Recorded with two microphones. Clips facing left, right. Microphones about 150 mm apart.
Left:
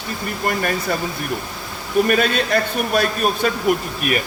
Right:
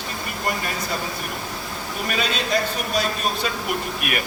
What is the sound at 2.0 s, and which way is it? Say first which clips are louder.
Speech: left 6 dB; 55° left (ahead or behind).